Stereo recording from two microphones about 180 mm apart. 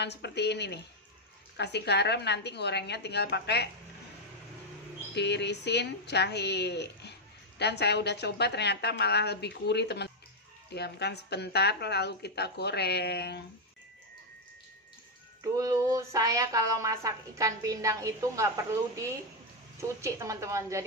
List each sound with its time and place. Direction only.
0.0 s a woman's voice: 70° left (ahead or behind)
5.1 s a woman's voice: 70° left (ahead or behind)
15.4 s speech: 20° right (ahead or behind)